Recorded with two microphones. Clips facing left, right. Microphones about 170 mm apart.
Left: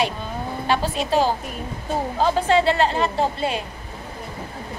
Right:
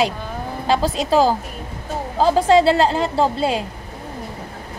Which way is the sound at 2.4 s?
90° right.